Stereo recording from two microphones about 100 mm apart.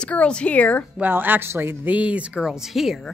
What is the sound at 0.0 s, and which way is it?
Speech, 10° left (ahead or behind).